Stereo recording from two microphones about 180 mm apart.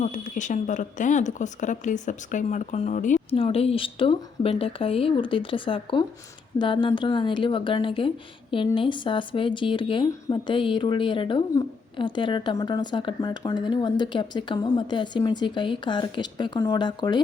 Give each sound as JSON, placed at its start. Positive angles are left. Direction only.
{"t": 0.0, "sound": "speech", "side_deg": 45}